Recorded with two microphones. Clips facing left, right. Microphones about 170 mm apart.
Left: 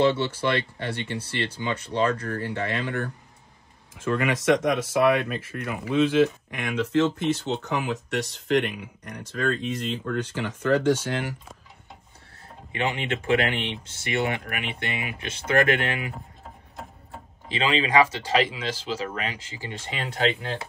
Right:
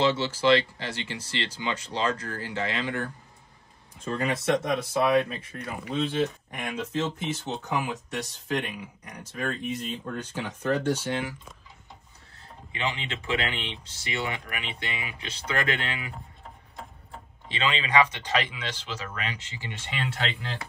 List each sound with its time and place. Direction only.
0.0 s speech: 55° left (ahead or behind)
3.9 s speech: 85° left
12.7 s speech: 50° left (ahead or behind)
17.6 s speech: 30° left (ahead or behind)